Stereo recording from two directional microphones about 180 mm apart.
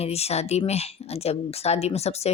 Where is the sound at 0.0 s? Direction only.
35° left (ahead or behind).